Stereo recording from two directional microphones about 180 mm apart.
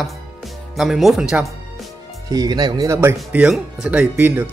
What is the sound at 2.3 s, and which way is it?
Speech, 20° right (ahead or behind).